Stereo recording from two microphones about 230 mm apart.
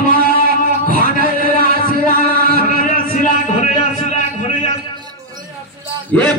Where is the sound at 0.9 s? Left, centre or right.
Right.